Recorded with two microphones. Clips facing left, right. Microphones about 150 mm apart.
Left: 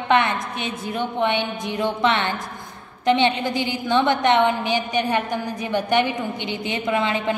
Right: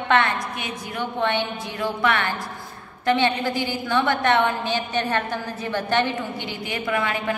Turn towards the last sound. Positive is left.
turn(degrees=20)  # may be behind; listen again after turning